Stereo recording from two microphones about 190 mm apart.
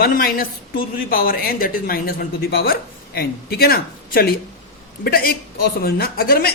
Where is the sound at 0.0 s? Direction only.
50° left (ahead or behind).